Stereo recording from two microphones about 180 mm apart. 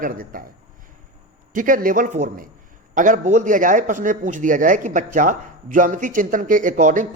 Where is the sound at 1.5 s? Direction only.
50° right (ahead or behind).